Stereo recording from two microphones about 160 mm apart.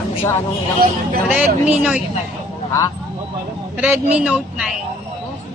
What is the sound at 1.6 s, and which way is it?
Speech, 10° right (ahead or behind).